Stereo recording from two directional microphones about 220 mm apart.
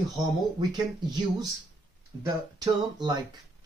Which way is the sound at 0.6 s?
20° right (ahead or behind).